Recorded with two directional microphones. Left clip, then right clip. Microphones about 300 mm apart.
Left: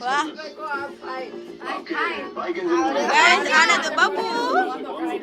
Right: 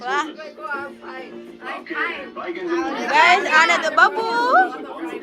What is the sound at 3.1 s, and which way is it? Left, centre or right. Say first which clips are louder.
Speech: right 3 dB; centre.